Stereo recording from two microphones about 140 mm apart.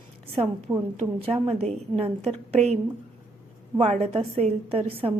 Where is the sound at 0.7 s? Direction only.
25° right (ahead or behind).